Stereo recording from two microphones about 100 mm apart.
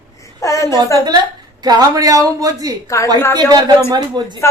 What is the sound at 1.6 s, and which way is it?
Speech, 45° right (ahead or behind).